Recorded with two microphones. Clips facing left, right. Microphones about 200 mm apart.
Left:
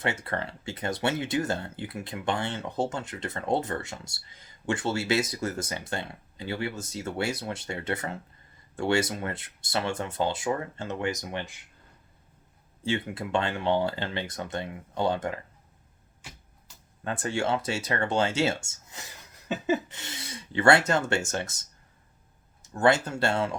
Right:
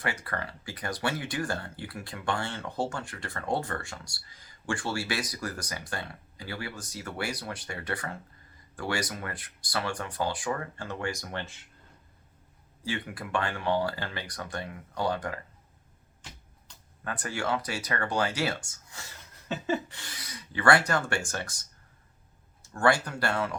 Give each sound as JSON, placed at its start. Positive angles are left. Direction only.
{"t": 0.0, "sound": "speech", "side_deg": 25}
{"t": 12.8, "sound": "speech", "side_deg": 25}
{"t": 16.2, "sound": "a sound", "side_deg": 10}
{"t": 17.0, "sound": "speech", "side_deg": 25}
{"t": 19.5, "sound": "a sound", "side_deg": 5}
{"t": 19.9, "sound": "speech", "side_deg": 25}
{"t": 22.6, "sound": "speech", "side_deg": 20}